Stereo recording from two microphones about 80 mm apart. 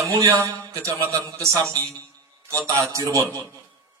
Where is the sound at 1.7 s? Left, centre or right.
Right.